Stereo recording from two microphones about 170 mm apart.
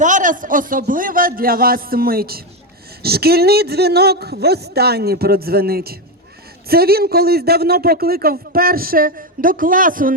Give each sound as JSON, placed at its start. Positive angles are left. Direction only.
{"t": 0.0, "sound": "a man's voice", "side_deg": -50}